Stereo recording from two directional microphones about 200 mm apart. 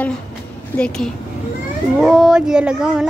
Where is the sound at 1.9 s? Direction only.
Centre (ahead or behind).